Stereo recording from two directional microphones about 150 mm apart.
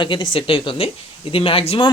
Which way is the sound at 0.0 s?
30° left (ahead or behind).